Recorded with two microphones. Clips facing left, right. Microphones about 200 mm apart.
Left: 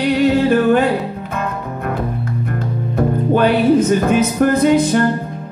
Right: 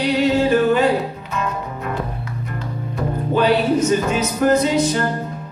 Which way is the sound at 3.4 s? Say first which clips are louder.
Left 3 dB; 55° left (ahead or behind).